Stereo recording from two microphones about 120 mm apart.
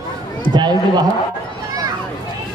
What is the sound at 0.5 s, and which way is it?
Speech, 35° right (ahead or behind).